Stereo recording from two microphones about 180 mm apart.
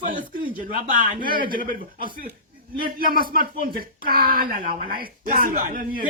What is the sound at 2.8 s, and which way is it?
Speech, 55° right (ahead or behind).